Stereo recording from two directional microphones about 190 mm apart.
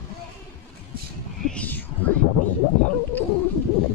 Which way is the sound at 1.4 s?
5° left (ahead or behind).